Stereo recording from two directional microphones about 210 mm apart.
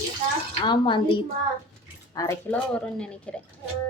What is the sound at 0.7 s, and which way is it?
Speech, 25° left (ahead or behind).